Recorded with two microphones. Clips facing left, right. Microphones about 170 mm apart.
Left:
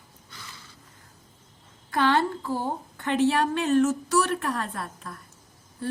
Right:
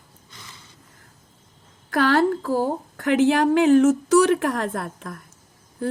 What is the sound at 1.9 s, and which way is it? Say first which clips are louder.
A woman's voice: right 5 dB; 90° right.